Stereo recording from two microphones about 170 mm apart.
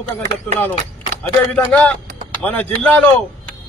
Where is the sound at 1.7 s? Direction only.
10° left (ahead or behind).